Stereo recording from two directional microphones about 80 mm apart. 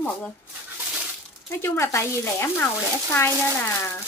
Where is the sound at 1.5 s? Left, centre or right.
Left.